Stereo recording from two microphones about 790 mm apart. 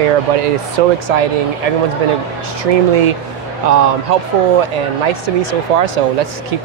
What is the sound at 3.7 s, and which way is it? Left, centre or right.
Speech, right.